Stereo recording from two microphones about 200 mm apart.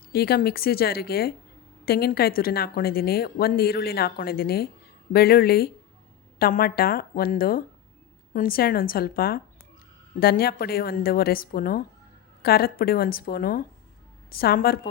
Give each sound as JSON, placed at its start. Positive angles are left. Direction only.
{"t": 0.1, "sound": "a woman's voice", "side_deg": 50}